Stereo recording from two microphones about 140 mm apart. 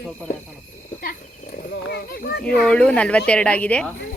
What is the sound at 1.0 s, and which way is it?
Wild animals, 90° left.